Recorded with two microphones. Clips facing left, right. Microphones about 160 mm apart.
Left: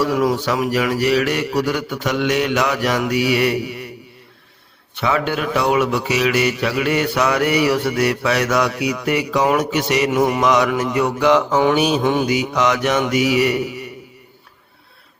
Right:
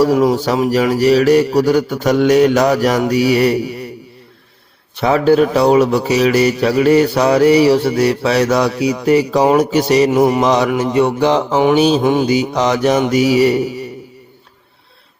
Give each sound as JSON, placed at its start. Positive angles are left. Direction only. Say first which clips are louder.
{"t": 0.0, "sound": "speech", "louder": "right 5 dB", "side_deg": -30}
{"t": 4.9, "sound": "speech", "louder": "right 9 dB", "side_deg": -35}